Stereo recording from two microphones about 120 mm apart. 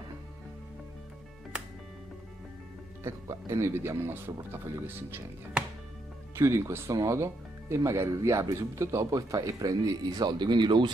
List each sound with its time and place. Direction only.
3.0 s speech: 25° right (ahead or behind)
6.3 s speech: 25° right (ahead or behind); by 10.9 s 40° right (ahead or behind)